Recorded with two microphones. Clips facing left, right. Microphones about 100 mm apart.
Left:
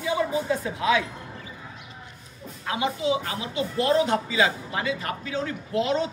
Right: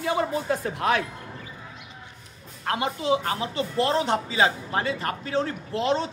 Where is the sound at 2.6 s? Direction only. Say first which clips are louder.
Right 1 dB; 50° right (ahead or behind).